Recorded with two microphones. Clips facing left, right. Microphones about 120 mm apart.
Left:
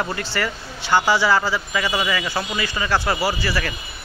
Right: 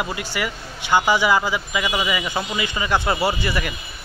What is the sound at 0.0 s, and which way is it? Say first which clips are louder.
Speech: left 1 dB; 10° right (ahead or behind).